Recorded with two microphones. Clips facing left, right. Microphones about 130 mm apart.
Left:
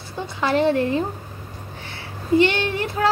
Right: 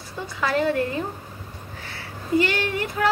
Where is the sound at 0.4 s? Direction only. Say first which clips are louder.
Left 3 dB; 25° left (ahead or behind).